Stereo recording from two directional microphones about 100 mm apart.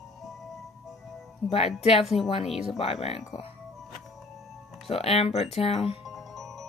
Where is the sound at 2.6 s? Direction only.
85° left.